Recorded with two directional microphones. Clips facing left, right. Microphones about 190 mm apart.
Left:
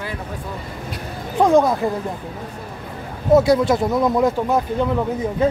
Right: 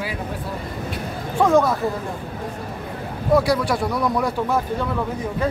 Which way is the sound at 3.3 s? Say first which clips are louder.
Left 4 dB; 25° left (ahead or behind).